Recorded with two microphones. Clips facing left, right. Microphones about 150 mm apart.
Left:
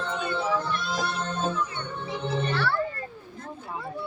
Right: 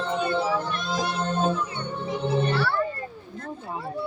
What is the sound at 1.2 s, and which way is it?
Music, 30° right (ahead or behind).